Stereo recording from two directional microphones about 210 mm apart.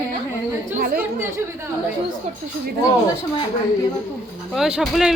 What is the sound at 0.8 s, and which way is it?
Speech, 45° right (ahead or behind).